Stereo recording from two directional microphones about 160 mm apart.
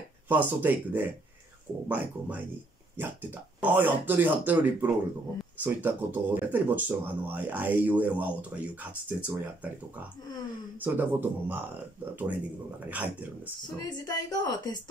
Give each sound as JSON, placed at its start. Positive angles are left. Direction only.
{"t": 0.3, "sound": "speech", "side_deg": -10}
{"t": 13.8, "sound": "a woman's voice", "side_deg": 25}